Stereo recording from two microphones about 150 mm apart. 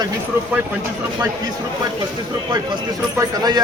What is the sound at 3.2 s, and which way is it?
Speech, 25° right (ahead or behind).